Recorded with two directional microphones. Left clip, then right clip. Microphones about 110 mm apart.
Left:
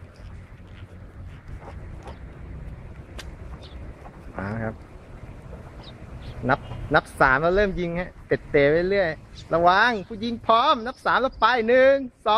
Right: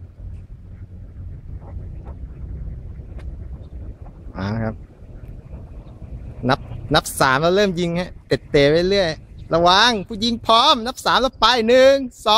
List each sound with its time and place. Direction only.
4.5 s speech: 30° right (ahead or behind)
6.4 s speech: 40° right (ahead or behind)